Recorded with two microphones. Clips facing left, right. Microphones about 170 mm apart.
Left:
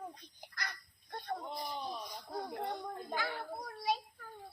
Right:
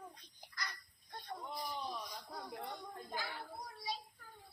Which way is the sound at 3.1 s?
65° left (ahead or behind).